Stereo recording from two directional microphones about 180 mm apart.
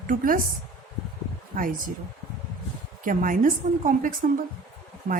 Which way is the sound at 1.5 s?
50° right (ahead or behind).